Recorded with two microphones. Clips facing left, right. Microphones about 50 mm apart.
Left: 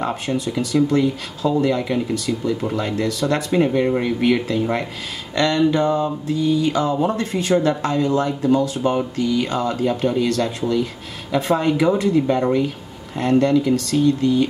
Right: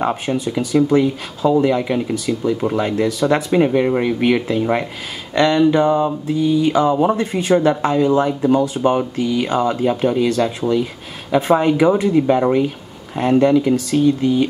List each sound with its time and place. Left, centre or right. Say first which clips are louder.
0.0 s speech: right 3 dB; centre